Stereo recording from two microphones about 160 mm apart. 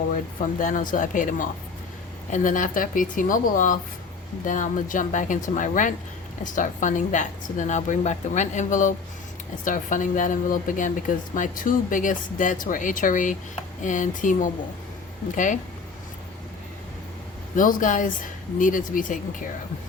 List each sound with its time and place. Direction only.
0.6 s a woman's voice: 55° left (ahead or behind)
17.5 s speech: 55° left (ahead or behind)